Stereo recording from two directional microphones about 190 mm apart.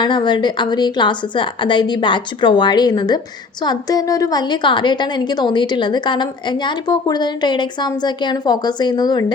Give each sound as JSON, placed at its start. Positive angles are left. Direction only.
{"t": 0.0, "sound": "a woman's voice", "side_deg": 25}